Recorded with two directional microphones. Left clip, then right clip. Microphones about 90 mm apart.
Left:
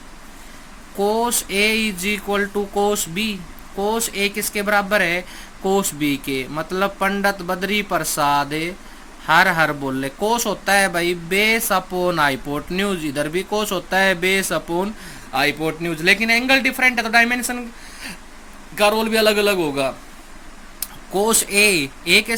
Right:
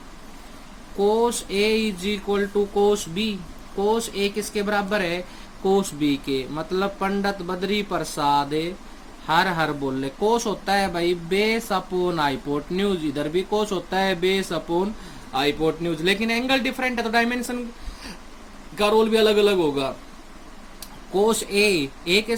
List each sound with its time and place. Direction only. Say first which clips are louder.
0.9 s speech: left 1 dB; 35° left (ahead or behind)
18.8 s speech: left 2 dB; 30° left (ahead or behind)
21.1 s speech: left 2 dB; 30° left (ahead or behind)